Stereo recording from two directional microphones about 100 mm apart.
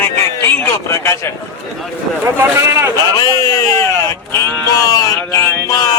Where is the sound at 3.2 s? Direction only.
35° left (ahead or behind).